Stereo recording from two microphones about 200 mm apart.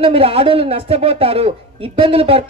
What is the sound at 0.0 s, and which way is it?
Speech, 30° right (ahead or behind).